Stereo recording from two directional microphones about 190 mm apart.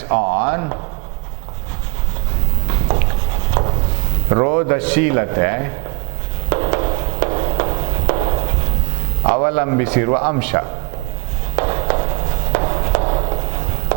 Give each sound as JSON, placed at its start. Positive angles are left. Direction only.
{"t": 0.1, "sound": "a man's voice", "side_deg": -15}
{"t": 4.3, "sound": "a man's voice", "side_deg": -20}
{"t": 6.5, "sound": "a sound", "side_deg": -25}
{"t": 9.3, "sound": "a man's voice", "side_deg": -15}
{"t": 11.5, "sound": "walk", "side_deg": -30}
{"t": 12.5, "sound": "run", "side_deg": -30}